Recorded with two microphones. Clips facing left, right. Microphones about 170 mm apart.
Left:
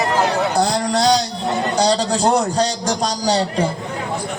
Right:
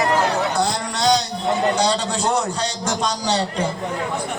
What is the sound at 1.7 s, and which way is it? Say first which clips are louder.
A man's voice: left 3 dB; 35° left (ahead or behind).